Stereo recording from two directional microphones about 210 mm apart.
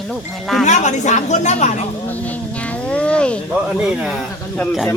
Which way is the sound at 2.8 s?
5° left (ahead or behind).